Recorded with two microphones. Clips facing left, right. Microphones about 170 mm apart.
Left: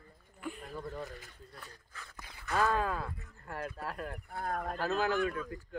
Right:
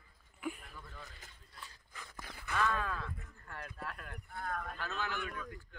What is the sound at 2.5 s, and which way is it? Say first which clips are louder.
Speech: left 5 dB; 35° left (ahead or behind).